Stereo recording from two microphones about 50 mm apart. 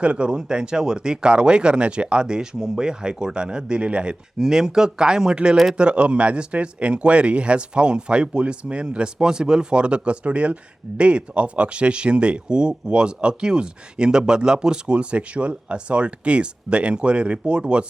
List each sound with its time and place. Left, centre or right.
0.0 s speech: right